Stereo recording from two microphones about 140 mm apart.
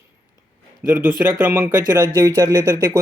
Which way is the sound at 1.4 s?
15° right (ahead or behind).